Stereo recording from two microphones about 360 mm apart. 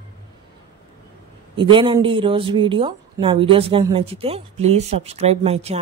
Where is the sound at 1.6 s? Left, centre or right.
Centre.